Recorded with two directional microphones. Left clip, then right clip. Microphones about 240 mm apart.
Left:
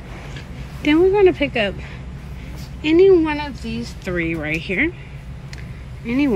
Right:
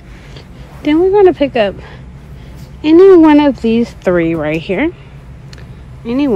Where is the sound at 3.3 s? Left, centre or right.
Right.